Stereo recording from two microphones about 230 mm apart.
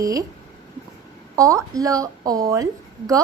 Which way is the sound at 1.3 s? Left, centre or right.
Centre.